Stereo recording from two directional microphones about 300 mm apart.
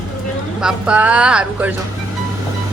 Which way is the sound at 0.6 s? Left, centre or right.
Centre.